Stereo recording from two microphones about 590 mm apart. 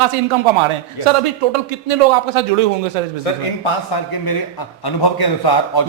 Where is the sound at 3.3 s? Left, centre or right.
Left.